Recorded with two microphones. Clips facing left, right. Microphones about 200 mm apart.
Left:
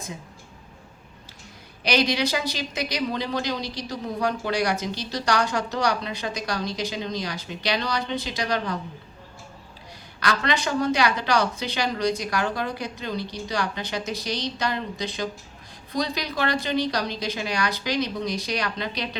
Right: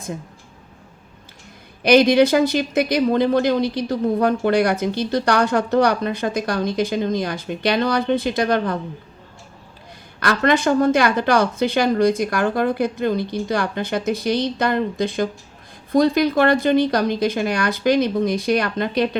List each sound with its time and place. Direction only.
1.8 s a woman's voice: 55° right (ahead or behind)
10.2 s a woman's voice: 55° right (ahead or behind)